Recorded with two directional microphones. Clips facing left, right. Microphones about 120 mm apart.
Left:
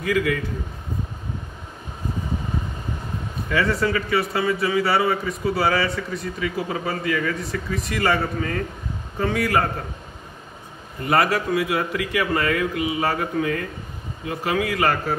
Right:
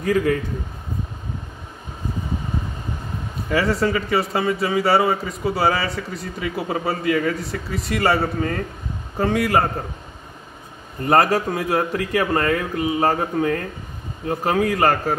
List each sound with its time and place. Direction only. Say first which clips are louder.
0.0 s speech: right 3 dB; 40° right (ahead or behind)
3.4 s speech: right 2 dB; 30° right (ahead or behind)
11.1 s speech: right 3 dB; 40° right (ahead or behind)